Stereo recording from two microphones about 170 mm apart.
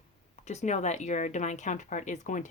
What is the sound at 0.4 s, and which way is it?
Speech, 45° left (ahead or behind).